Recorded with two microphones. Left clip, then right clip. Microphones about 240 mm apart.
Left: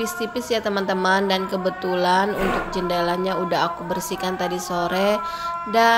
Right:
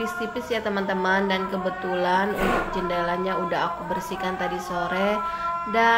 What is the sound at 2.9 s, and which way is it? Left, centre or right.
Speech, left.